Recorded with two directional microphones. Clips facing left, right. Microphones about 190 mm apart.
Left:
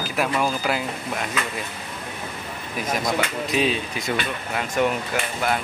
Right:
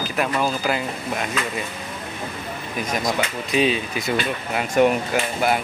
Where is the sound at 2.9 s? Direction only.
Centre (ahead or behind).